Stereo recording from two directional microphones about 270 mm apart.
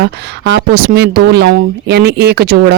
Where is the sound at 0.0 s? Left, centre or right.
Right.